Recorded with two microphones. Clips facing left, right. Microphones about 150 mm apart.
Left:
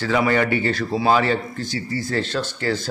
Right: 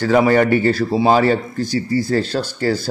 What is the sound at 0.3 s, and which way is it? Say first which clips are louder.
Speech: right 6 dB; 40° right (ahead or behind).